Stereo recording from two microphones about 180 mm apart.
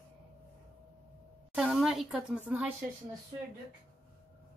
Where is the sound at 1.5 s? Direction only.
5° right (ahead or behind).